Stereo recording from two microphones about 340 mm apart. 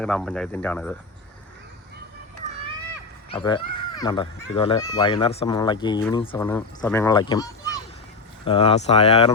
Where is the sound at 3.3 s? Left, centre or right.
Centre.